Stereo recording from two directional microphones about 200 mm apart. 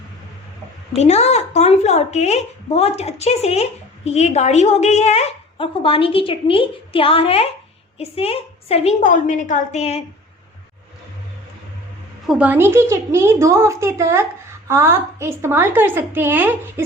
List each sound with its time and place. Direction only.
0.9 s a woman's voice: 30° left (ahead or behind)
12.2 s a woman's voice: 5° right (ahead or behind)